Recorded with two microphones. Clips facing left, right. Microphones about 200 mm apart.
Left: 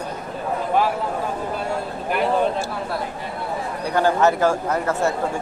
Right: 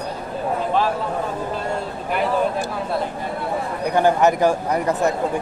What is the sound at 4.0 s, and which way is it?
Speech, 15° right (ahead or behind).